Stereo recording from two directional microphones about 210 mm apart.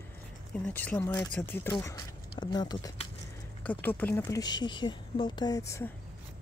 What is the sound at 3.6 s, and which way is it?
Speech, 10° left (ahead or behind).